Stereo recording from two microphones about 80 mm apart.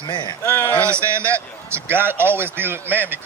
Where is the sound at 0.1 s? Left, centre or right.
Left.